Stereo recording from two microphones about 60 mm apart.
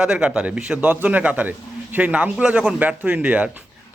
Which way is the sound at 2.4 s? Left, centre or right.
Centre.